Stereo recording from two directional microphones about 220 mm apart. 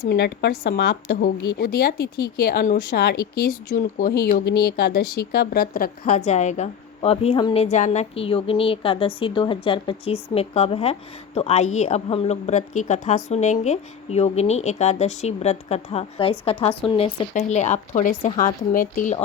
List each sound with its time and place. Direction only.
0.0 s a woman's voice: 50° left (ahead or behind)